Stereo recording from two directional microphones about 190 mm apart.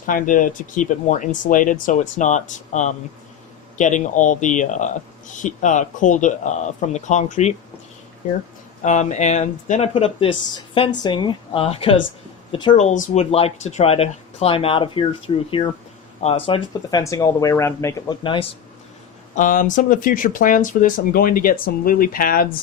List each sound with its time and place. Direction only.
0.0 s speech: 45° left (ahead or behind)
8.8 s speech: 40° left (ahead or behind)
12.7 s speech: 40° left (ahead or behind); by 18.2 s 15° left (ahead or behind)
18.2 s speech: 25° left (ahead or behind)
19.4 s speech: 45° left (ahead or behind)